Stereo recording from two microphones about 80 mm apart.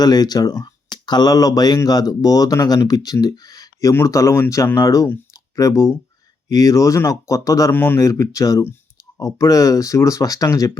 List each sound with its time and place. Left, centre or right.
0.0 s speech: left
5.3 s clicking: left
6.5 s speech: left
7.7 s speech: left
7.9 s speech: left